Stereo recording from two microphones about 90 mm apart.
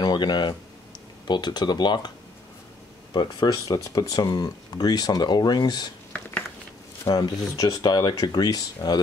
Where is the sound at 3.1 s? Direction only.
55° left (ahead or behind).